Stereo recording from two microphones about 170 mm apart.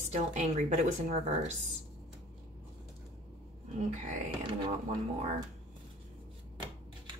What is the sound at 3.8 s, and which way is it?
Speech, 45° right (ahead or behind).